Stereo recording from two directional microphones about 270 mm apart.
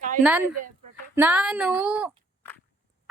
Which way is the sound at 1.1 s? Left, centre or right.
Centre.